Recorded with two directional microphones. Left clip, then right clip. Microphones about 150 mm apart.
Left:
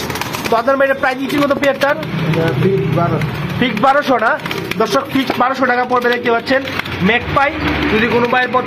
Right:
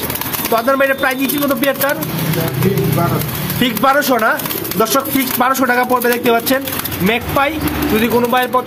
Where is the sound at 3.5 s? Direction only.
35° right (ahead or behind).